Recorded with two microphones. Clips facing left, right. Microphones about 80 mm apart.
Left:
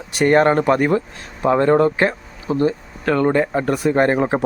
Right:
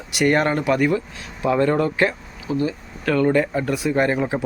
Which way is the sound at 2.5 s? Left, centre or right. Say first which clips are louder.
Left 5 dB; left.